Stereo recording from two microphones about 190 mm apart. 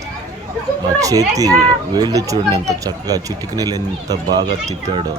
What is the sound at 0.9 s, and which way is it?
A child's voice, 20° right (ahead or behind).